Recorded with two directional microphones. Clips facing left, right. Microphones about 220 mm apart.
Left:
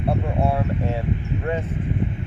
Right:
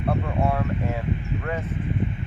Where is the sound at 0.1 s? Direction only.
25° left (ahead or behind).